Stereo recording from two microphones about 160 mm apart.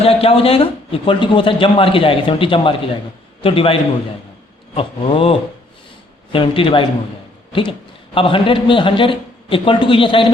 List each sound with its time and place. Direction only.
0.0 s a man's voice: 35° left (ahead or behind)